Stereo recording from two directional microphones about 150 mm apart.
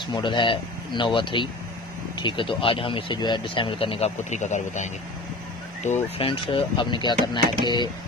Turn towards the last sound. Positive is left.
turn(degrees=30)  # may be behind; listen again after turning